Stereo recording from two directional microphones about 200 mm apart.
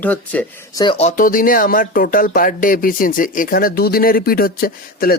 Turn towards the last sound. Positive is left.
turn(degrees=50)  # may be behind; listen again after turning